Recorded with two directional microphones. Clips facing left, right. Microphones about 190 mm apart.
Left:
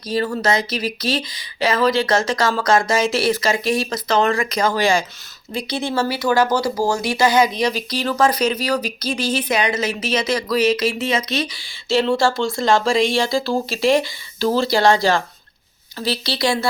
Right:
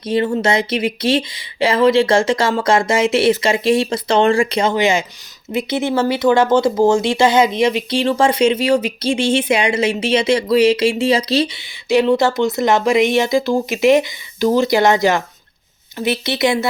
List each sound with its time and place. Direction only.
0.0 s speech: 25° right (ahead or behind)
11.9 s speech: 15° right (ahead or behind)